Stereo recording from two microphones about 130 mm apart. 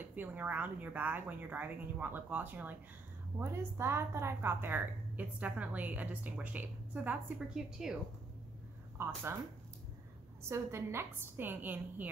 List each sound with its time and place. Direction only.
0.1 s a woman's voice: 15° right (ahead or behind)
8.9 s speech: 20° right (ahead or behind)
10.5 s a woman's voice: 20° right (ahead or behind)